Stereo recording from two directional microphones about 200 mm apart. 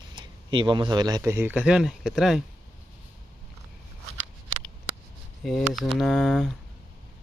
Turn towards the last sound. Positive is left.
turn(degrees=0)  # may be behind; listen again after turning